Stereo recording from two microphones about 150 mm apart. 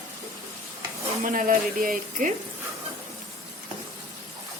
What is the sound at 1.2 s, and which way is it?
A woman's voice, 65° right (ahead or behind).